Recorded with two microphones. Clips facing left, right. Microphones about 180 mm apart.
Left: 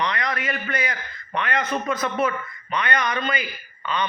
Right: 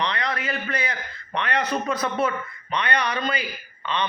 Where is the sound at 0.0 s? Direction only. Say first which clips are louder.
Left 1 dB; 30° right (ahead or behind).